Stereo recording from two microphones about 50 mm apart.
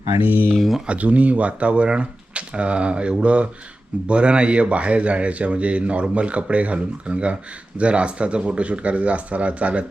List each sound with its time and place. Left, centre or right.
0.3 s speech: right
0.5 s speech: centre
0.9 s speech: right